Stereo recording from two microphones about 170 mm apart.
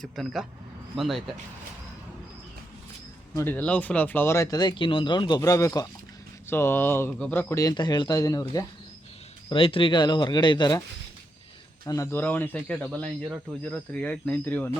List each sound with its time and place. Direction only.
0.0 s a man's voice: centre (ahead or behind)
3.3 s a man's voice: 10° left (ahead or behind)
9.5 s speech: 30° left (ahead or behind)
11.9 s a man's voice: 15° left (ahead or behind)